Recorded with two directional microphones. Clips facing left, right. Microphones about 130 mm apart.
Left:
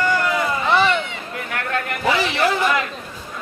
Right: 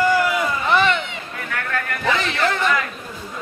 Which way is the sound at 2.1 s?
10° left (ahead or behind).